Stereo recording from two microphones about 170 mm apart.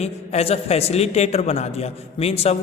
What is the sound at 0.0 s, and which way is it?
A man's voice, 40° left (ahead or behind).